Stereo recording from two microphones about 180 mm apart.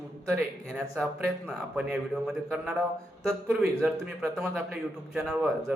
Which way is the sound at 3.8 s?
5° right (ahead or behind).